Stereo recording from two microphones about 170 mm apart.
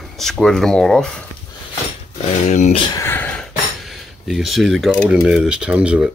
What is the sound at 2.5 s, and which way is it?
Speech, 40° left (ahead or behind).